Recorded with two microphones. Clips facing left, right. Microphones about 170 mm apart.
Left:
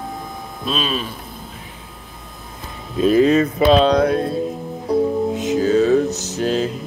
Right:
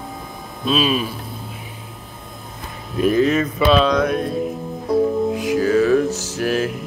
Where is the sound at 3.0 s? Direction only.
30° left (ahead or behind).